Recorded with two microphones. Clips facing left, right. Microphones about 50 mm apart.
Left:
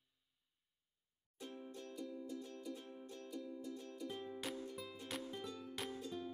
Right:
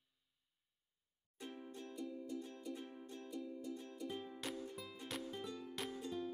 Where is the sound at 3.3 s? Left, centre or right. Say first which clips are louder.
Right 1 dB; centre.